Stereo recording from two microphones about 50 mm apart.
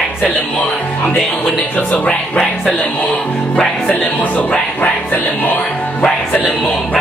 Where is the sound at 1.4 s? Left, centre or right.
Left.